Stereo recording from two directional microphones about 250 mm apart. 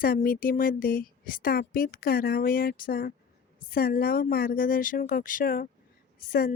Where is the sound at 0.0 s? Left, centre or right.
Left.